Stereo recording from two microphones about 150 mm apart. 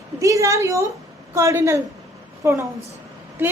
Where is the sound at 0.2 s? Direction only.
20° right (ahead or behind).